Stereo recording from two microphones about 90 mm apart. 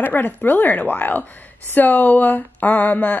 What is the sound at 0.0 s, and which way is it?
Speech, 20° left (ahead or behind).